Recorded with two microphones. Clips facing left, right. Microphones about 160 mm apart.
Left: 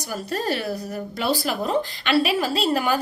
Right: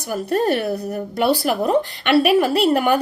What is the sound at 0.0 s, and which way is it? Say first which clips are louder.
A woman's voice: right 7 dB; 55° right (ahead or behind).